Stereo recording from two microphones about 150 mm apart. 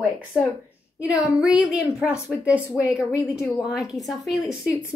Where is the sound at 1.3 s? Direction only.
5° right (ahead or behind).